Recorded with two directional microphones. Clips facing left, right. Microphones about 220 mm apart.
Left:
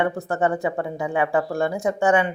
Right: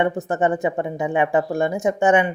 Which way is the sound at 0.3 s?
20° right (ahead or behind).